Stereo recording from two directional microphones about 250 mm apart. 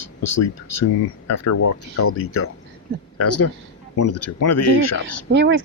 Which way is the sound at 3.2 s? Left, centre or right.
Left.